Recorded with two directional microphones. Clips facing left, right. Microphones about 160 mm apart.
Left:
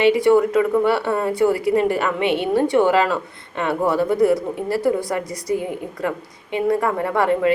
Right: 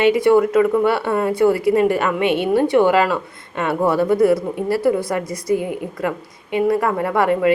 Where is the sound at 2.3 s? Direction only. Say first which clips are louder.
Right 2 dB; 15° right (ahead or behind).